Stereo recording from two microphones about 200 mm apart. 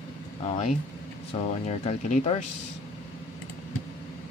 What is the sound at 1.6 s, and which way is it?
Speech, 35° left (ahead or behind).